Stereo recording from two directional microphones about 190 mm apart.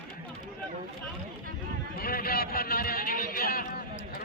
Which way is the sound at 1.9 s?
50° left (ahead or behind).